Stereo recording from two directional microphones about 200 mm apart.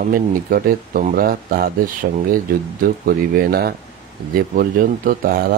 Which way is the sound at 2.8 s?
45° right (ahead or behind).